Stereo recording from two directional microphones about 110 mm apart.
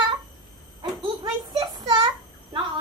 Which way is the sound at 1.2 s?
40° right (ahead or behind).